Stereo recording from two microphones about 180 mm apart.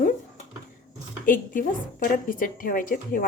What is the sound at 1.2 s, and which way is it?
A woman's voice, 50° left (ahead or behind).